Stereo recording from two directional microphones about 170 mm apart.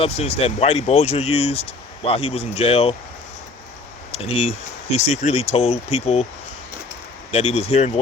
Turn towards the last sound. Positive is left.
turn(degrees=35)  # may be behind; listen again after turning